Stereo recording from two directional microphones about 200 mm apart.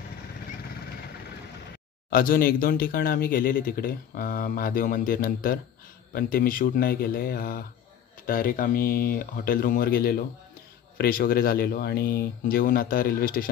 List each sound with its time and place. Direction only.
2.0 s speech: 45° left (ahead or behind)